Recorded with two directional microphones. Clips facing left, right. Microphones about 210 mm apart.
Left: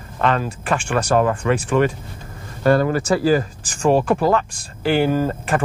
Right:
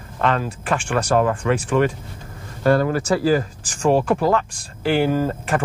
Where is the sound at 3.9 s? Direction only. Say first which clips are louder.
Left 1 dB; 30° left (ahead or behind).